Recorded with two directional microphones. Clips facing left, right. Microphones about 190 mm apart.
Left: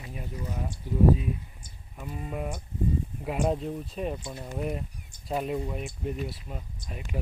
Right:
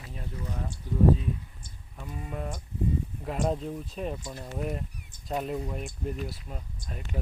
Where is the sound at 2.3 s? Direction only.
10° left (ahead or behind).